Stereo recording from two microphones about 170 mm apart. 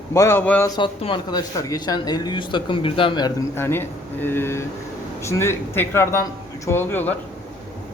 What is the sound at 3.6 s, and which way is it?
A man's voice, 15° left (ahead or behind).